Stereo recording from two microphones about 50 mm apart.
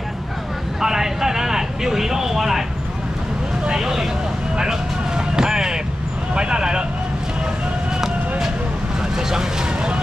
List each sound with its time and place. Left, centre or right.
0.7 s vehicle: centre
3.6 s vehicle: centre
6.3 s a sound: centre
9.3 s vehicle: centre